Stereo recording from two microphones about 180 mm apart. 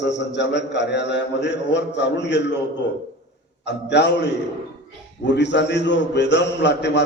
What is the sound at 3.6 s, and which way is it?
A man's voice, 70° left (ahead or behind).